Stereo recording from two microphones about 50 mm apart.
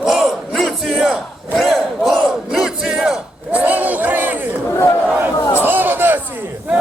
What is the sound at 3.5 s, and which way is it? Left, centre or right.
A man's voice, right.